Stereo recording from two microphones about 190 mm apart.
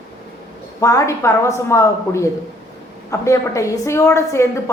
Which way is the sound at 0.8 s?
15° left (ahead or behind).